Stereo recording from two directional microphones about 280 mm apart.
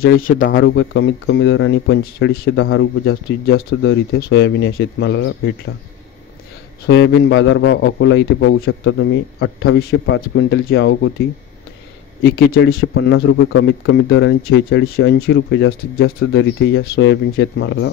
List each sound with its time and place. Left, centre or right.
0.4 s speech: left
6.9 s speech: left
12.2 s speech: left
12.9 s speech: left